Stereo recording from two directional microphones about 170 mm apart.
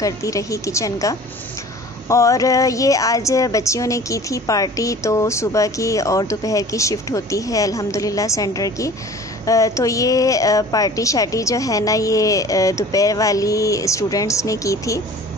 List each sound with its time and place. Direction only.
0.0 s speech: 20° left (ahead or behind)